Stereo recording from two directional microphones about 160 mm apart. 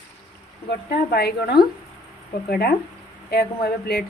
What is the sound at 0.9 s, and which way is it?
A woman's voice, 85° left.